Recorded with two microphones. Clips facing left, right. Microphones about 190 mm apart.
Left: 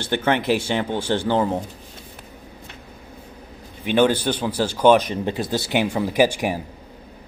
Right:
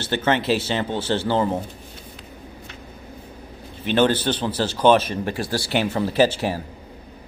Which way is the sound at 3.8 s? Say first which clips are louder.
Left 1 dB; 10° left (ahead or behind).